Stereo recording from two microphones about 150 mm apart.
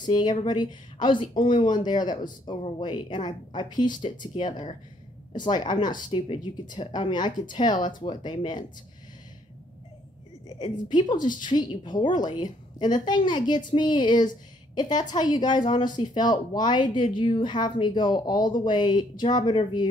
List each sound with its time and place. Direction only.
0.0 s a woman's voice: 30° left (ahead or behind)
10.6 s a woman's voice: 30° left (ahead or behind)